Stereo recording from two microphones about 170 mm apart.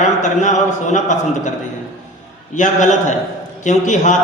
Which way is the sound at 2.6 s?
45° left (ahead or behind).